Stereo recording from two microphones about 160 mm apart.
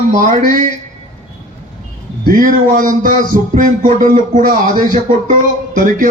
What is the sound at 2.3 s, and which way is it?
Speech, 60° right (ahead or behind).